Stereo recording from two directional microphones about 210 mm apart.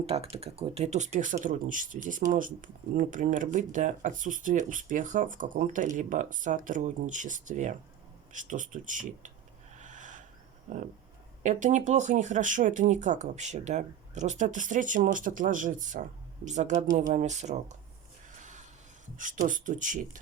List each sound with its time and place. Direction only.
0.0 s speech: 30° right (ahead or behind)
9.7 s snort: 35° right (ahead or behind)
11.4 s speech: 35° right (ahead or behind)
19.1 s speech: 40° right (ahead or behind)